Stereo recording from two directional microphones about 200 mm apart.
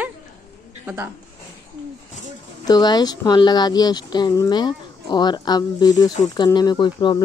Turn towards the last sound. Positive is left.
turn(degrees=25)  # may be behind; listen again after turning